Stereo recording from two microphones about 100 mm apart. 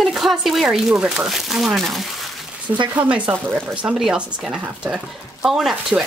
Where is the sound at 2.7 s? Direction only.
50° right (ahead or behind).